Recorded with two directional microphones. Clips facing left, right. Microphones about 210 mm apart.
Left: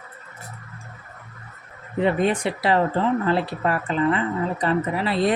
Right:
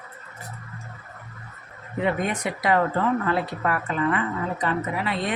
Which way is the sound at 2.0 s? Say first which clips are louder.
Left 4 dB; 30° left (ahead or behind).